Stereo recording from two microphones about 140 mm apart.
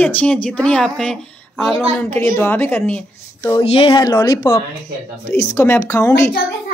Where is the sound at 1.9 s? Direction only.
15° left (ahead or behind).